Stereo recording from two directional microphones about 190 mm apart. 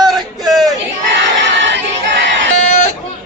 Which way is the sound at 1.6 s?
70° right (ahead or behind).